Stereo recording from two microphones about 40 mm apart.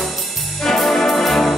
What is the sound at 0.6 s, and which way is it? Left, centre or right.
Brass instrument, centre.